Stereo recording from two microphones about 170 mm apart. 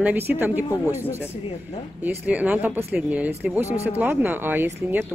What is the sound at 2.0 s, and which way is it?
Speech, 10° right (ahead or behind).